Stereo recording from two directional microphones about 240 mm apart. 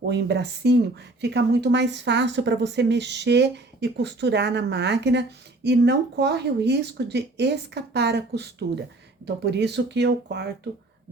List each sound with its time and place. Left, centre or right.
0.1 s speech: right